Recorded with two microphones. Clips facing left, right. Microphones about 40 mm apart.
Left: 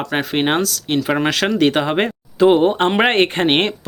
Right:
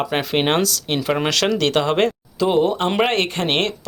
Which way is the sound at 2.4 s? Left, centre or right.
Left.